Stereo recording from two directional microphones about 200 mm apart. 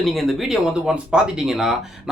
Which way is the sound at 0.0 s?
Centre (ahead or behind).